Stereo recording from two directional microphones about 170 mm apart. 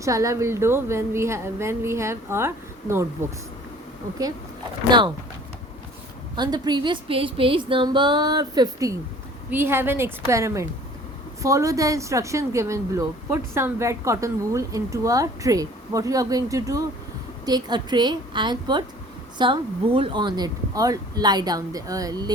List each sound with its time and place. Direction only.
0.0 s a woman's voice: 20° right (ahead or behind)
4.9 s a woman's voice: 30° right (ahead or behind)
6.3 s a woman's voice: 25° right (ahead or behind)